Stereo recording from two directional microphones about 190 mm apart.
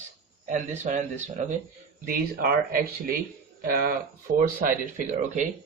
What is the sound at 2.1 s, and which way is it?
Speech, 50° right (ahead or behind).